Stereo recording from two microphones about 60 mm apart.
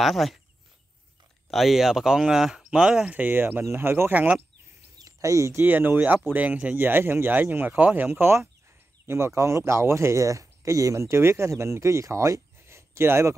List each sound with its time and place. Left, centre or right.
0.0 s speech: centre
1.5 s speech: centre
3.2 s speech: right
4.9 s a sound: right
5.6 s speech: right
9.0 s speech: right